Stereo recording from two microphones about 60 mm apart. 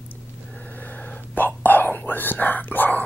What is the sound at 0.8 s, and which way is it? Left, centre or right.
Whispering, left.